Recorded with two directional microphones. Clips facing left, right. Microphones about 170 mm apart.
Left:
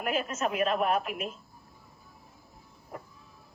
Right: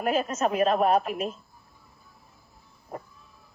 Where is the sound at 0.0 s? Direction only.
40° right (ahead or behind).